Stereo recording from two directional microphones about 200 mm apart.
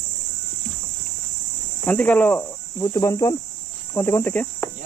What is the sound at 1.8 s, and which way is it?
Cricket, 10° left (ahead or behind).